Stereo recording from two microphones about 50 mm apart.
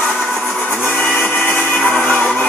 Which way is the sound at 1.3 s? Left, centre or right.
Left.